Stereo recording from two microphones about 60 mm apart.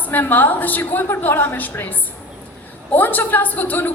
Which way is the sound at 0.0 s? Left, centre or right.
Left.